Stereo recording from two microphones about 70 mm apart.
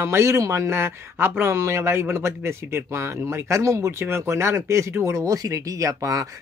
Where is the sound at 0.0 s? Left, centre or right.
Right.